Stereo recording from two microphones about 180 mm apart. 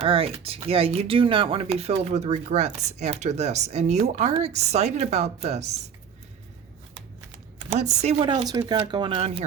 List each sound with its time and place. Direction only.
0.0 s speech: 30° right (ahead or behind)
7.6 s speech: 40° right (ahead or behind)